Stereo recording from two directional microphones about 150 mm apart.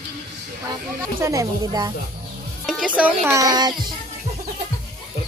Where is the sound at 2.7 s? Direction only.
5° right (ahead or behind).